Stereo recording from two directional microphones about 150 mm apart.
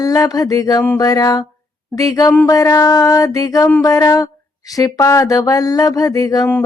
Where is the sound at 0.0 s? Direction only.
25° left (ahead or behind).